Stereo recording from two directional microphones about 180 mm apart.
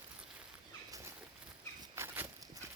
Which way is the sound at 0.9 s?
20° right (ahead or behind).